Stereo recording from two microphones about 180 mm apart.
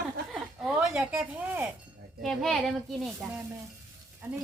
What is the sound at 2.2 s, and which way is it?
A woman's voice, centre (ahead or behind).